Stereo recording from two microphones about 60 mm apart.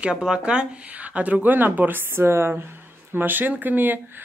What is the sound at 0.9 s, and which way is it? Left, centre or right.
Speech, right.